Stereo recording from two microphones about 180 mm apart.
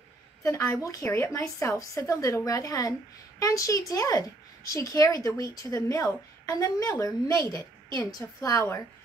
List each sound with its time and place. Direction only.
0.4 s a woman's voice: 15° left (ahead or behind)